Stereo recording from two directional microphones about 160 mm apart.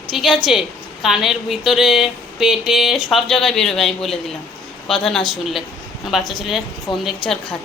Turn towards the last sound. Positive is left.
turn(degrees=5)  # may be behind; listen again after turning